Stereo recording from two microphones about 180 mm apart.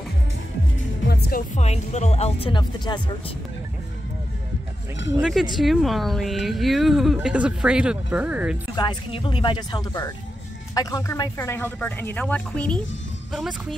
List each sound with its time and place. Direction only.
1.0 s music: 60° left (ahead or behind)
1.5 s speech: 40° left (ahead or behind)
5.2 s speech: centre (ahead or behind)
8.7 s speech: 25° left (ahead or behind); by 13.7 s centre (ahead or behind)